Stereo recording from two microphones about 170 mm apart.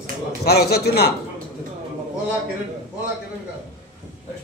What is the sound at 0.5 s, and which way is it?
Speech, 70° left (ahead or behind).